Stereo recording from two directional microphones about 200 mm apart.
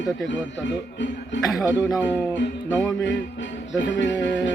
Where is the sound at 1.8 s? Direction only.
15° left (ahead or behind).